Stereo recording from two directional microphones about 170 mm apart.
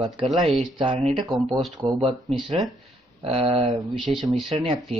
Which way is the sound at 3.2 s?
30° right (ahead or behind).